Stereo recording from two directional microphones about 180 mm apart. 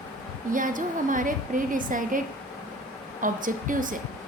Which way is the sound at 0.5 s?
50° right (ahead or behind).